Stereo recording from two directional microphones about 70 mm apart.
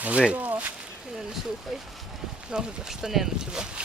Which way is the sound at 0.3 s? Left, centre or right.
Right.